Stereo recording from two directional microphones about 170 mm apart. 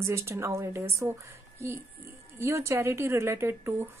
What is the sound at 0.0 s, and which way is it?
A woman's voice, 15° right (ahead or behind).